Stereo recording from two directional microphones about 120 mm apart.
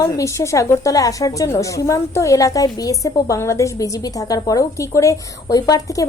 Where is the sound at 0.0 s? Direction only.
25° left (ahead or behind).